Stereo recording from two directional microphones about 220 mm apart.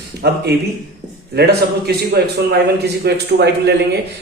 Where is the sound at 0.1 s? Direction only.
50° right (ahead or behind).